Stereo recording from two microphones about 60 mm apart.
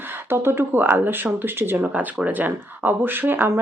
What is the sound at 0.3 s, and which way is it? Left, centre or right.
Speech, right.